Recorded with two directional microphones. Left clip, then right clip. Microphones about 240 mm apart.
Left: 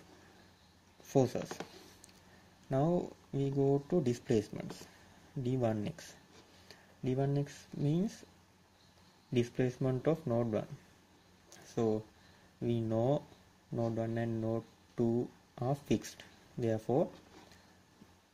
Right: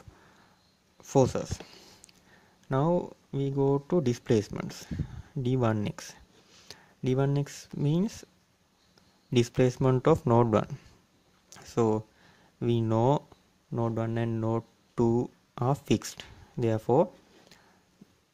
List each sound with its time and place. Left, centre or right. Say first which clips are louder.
1.0 s speech: right 7 dB; right
2.7 s speech: right 5 dB; right
9.3 s speech: right 8 dB; right
11.5 s a sound: right 7 dB; right
12.6 s speech: right 7 dB; right